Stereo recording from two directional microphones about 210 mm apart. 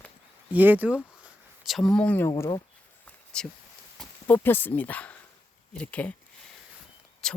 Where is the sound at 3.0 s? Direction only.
5° left (ahead or behind).